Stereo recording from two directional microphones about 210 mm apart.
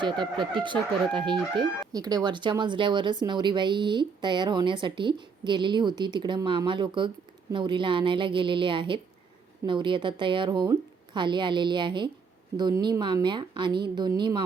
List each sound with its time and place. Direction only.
0.0 s speech: 20° right (ahead or behind)